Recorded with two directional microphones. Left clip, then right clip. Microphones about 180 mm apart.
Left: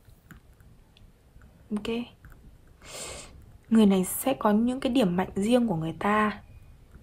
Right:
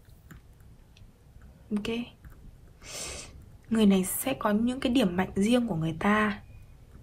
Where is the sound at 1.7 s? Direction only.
15° left (ahead or behind).